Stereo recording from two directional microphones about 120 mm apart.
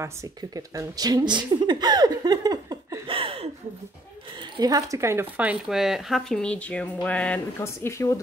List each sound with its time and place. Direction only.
0.0 s speech: 30° right (ahead or behind)
3.1 s speech: 50° right (ahead or behind)
4.6 s speech: 30° right (ahead or behind); by 7.4 s 10° left (ahead or behind)
7.6 s a woman's voice: 25° left (ahead or behind)